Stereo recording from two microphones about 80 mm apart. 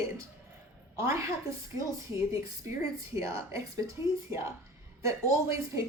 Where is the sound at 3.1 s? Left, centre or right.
Right.